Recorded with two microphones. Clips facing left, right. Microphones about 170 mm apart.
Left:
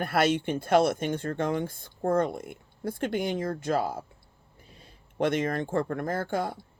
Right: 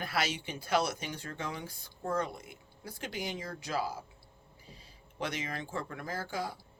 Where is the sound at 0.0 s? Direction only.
55° left (ahead or behind).